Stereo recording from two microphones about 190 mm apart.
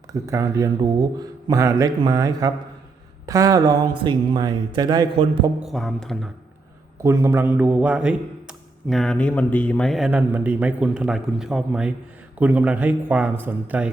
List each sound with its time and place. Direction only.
0.1 s speech: 15° right (ahead or behind)
5.5 s a man's voice: centre (ahead or behind)
7.0 s a man's voice: 15° right (ahead or behind)